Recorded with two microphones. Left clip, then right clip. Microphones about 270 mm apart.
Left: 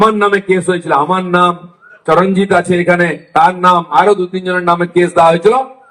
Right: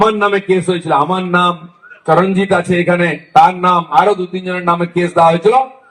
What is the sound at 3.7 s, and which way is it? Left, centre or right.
A man's voice, right.